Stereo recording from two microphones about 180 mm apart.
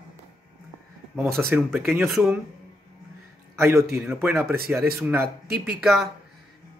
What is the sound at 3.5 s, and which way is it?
A man's voice, 15° right (ahead or behind).